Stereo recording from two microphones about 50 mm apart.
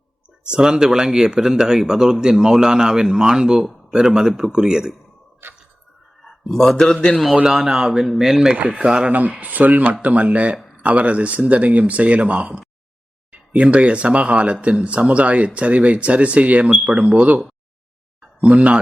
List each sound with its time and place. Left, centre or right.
0.5 s a man's voice: centre
5.4 s a sound: right
6.2 s a man's voice: centre
7.4 s a man's voice: centre
8.5 s speech: right
9.1 s speech: right